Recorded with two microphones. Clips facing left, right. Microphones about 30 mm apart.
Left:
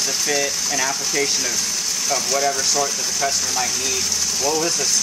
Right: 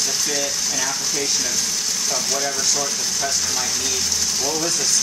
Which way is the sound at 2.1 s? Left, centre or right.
Centre.